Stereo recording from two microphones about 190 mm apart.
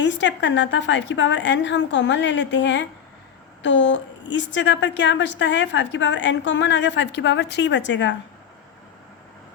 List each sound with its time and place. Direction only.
0.0 s a woman's voice: 70° left (ahead or behind)